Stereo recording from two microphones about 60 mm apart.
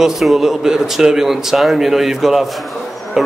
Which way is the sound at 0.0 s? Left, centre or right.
Centre.